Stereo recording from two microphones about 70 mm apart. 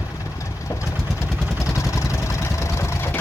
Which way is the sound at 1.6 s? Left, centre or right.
Left.